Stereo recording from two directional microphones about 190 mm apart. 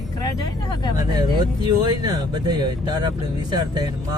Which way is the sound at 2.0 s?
20° right (ahead or behind).